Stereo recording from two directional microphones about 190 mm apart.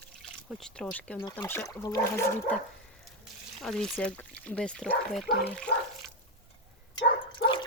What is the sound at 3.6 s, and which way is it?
Speech, 5° left (ahead or behind).